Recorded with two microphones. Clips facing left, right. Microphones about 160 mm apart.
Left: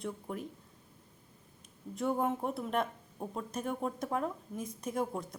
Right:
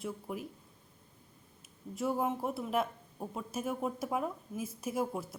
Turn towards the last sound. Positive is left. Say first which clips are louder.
# even
turn(degrees=-5)  # may be behind; listen again after turning